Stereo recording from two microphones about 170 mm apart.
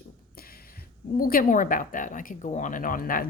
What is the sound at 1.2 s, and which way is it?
Speech, 55° left (ahead or behind).